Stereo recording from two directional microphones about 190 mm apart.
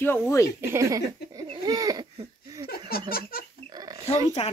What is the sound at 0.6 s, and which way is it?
Speech, 15° right (ahead or behind).